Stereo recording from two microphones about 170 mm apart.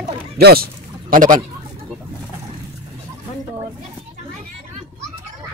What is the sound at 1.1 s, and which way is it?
Speech, 55° right (ahead or behind).